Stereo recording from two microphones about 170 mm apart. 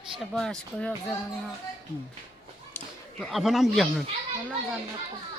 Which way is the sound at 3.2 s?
Centre (ahead or behind).